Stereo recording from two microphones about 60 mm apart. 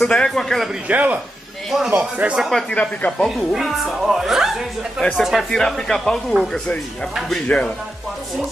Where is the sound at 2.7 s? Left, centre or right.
Left.